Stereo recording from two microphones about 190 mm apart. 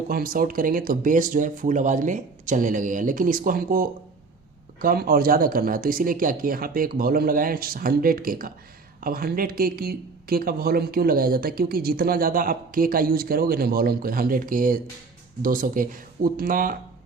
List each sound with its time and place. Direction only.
0.1 s speech: 50° right (ahead or behind)